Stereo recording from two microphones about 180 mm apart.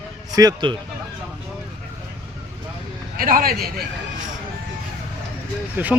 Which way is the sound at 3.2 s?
50° right (ahead or behind).